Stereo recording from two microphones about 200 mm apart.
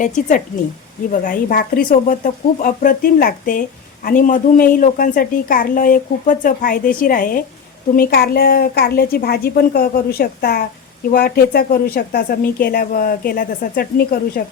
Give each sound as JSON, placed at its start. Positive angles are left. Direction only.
{"t": 0.0, "sound": "a woman's voice", "side_deg": 40}